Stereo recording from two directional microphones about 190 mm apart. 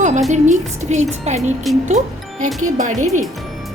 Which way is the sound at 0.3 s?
40° right (ahead or behind).